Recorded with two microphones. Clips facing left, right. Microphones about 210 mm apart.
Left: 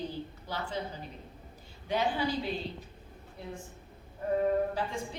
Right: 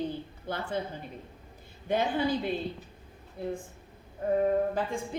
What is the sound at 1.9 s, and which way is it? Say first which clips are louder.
Speech: right 3 dB; 55° right (ahead or behind).